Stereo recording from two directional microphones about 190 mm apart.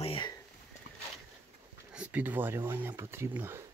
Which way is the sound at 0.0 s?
30° left (ahead or behind).